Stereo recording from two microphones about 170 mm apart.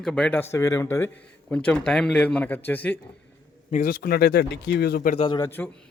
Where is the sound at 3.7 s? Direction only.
50° left (ahead or behind); by 5.1 s 70° left (ahead or behind).